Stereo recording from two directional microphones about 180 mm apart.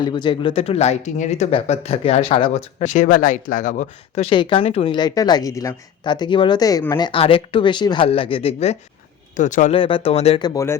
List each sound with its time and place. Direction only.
0.0 s speech: 25° left (ahead or behind)
4.9 s speech: 20° left (ahead or behind); by 9.7 s 45° left (ahead or behind)
9.7 s speech: 30° left (ahead or behind)